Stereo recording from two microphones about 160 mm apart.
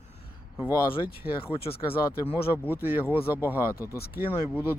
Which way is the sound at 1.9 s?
15° left (ahead or behind).